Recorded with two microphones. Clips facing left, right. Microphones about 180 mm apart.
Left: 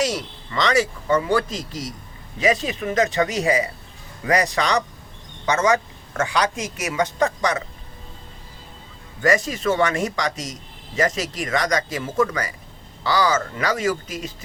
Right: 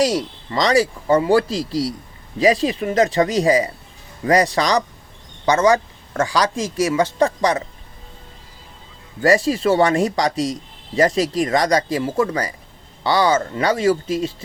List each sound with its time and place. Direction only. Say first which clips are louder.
0.0 s speech: right 5 dB; 35° right (ahead or behind)
9.2 s speech: right 4 dB; 35° right (ahead or behind)